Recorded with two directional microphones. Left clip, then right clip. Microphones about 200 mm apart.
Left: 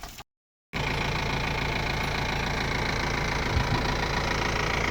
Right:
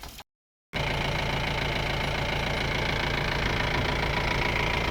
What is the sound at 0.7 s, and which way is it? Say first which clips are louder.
Vehicle: even; 10° right (ahead or behind).